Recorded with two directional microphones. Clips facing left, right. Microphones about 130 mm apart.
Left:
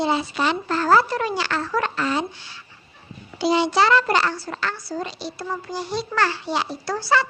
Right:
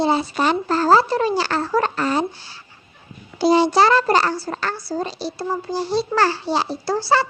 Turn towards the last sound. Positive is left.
turn(degrees=-30)  # may be behind; listen again after turning